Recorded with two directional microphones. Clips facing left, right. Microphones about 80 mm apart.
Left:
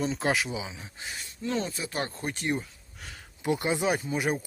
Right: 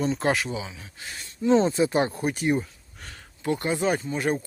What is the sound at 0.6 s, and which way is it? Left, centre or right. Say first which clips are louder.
Speech: right 2 dB; centre.